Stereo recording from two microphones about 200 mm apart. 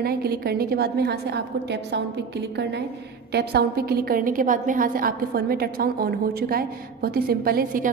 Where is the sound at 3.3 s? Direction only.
55° right (ahead or behind).